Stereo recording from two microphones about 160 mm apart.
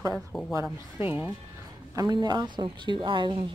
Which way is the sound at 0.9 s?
10° right (ahead or behind).